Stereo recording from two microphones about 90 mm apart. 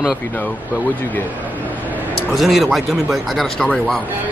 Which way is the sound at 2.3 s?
Centre (ahead or behind).